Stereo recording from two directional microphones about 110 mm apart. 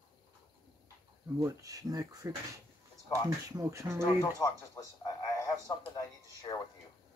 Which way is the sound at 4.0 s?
35° left (ahead or behind).